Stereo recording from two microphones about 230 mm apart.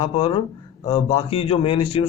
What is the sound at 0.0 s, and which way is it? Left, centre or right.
A man's voice, left.